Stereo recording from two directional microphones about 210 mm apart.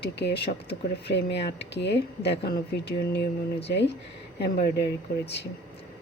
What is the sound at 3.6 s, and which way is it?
Speech, 55° left (ahead or behind).